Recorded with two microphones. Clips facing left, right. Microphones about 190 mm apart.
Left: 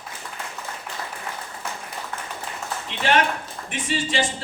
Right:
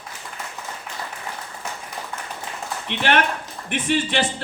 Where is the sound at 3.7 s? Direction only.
65° right (ahead or behind).